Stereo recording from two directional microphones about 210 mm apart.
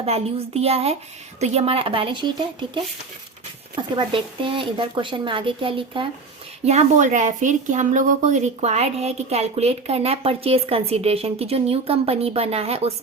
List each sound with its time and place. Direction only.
0.0 s a woman's voice: 30° right (ahead or behind)